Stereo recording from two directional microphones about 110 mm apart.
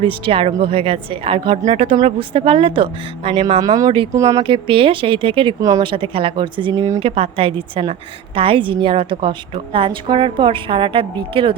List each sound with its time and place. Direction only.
0.0 s a woman's voice: 55° right (ahead or behind)
3.6 s speech: 35° right (ahead or behind)
4.4 s a woman's voice: 55° right (ahead or behind)
5.5 s speech: 30° right (ahead or behind)
5.8 s a woman's voice: 50° right (ahead or behind)
6.7 s speech: 30° right (ahead or behind)
7.0 s a woman's voice: 60° right (ahead or behind)